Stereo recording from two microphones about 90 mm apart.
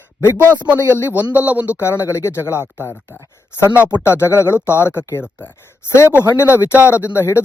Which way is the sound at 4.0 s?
30° left (ahead or behind).